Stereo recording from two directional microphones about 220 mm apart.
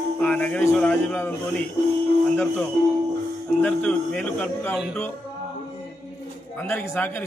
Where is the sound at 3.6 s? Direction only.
5° left (ahead or behind).